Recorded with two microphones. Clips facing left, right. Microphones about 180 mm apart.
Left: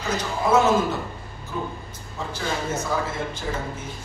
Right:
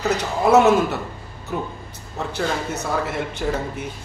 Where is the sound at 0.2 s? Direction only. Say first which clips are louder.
Right 4 dB; 65° right (ahead or behind).